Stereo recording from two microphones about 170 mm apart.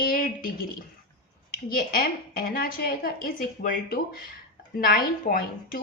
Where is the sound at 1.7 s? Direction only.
60° left (ahead or behind).